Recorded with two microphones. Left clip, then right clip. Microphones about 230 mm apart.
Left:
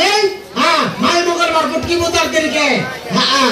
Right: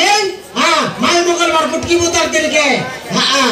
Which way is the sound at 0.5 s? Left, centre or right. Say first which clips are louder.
Right 2 dB; right.